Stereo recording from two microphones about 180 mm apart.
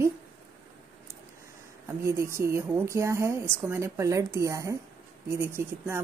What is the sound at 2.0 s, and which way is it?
Speech, 15° right (ahead or behind).